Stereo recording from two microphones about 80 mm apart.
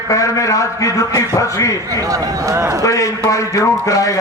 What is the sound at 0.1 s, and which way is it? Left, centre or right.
A man's voice, left.